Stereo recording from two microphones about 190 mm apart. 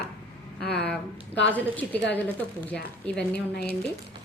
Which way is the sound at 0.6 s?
60° left (ahead or behind).